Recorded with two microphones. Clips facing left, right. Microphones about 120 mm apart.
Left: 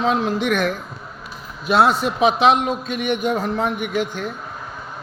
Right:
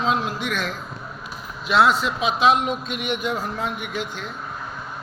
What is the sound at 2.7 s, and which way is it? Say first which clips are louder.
A man's voice: left 4 dB; 50° left (ahead or behind).